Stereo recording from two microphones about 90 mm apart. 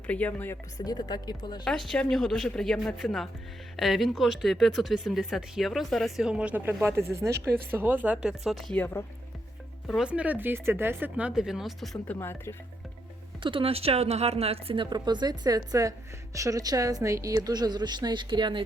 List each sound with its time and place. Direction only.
0.1 s speech: 20° left (ahead or behind)
0.9 s speech: 50° left (ahead or behind)
1.6 s speech: 5° left (ahead or behind); by 6.7 s 20° right (ahead or behind)
6.8 s speech: 30° right (ahead or behind); by 8.7 s centre (ahead or behind)
10.0 s speech: 15° right (ahead or behind)
11.2 s speech: 10° right (ahead or behind)
12.0 s speech: 25° left (ahead or behind)
13.4 s speech: 80° right
14.8 s a woman's voice: 55° right (ahead or behind)